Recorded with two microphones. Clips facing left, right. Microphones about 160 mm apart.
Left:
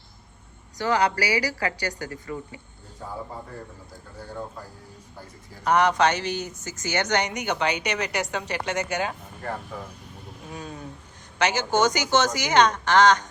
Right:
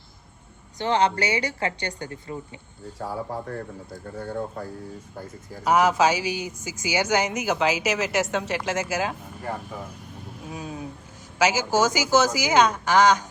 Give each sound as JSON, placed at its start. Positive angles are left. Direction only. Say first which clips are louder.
{"t": 0.8, "sound": "a woman's voice", "louder": "right 1 dB", "side_deg": -25}
{"t": 5.6, "sound": "speech", "louder": "right 1 dB", "side_deg": -5}